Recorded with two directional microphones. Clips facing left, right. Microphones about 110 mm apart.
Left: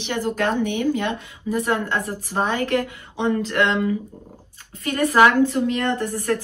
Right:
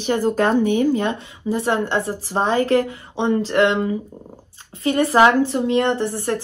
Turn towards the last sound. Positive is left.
turn(degrees=-25)  # may be behind; listen again after turning